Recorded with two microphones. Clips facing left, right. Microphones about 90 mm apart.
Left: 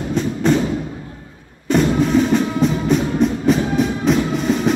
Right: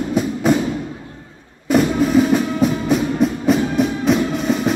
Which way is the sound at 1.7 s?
5° right (ahead or behind).